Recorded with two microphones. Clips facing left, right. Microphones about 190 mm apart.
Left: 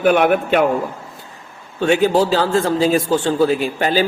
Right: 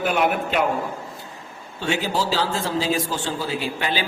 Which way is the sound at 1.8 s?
55° left (ahead or behind).